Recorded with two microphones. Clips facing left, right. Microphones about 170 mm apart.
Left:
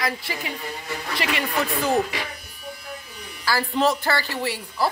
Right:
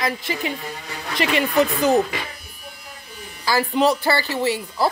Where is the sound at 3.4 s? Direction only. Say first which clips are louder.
Right 3 dB; 20° right (ahead or behind).